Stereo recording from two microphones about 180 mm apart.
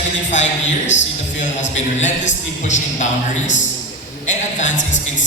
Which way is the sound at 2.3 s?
40° left (ahead or behind).